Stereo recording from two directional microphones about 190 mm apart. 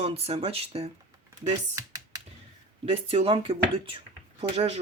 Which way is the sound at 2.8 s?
30° right (ahead or behind).